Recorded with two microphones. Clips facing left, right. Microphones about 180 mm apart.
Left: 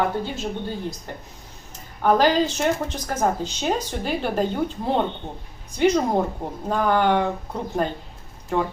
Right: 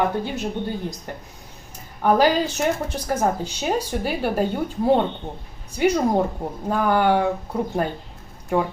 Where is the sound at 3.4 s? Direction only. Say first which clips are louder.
Right 1 dB; 10° right (ahead or behind).